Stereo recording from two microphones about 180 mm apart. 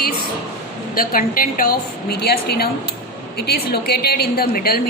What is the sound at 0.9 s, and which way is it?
A woman's voice, 55° left (ahead or behind).